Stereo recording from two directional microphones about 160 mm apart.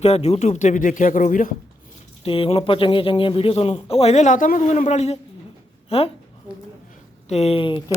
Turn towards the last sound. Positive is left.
turn(degrees=30)  # may be behind; listen again after turning